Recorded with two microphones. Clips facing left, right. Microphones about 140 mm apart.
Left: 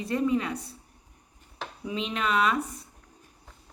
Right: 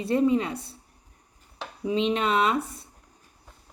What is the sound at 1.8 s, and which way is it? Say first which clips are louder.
Speech: right 6 dB; 25° right (ahead or behind).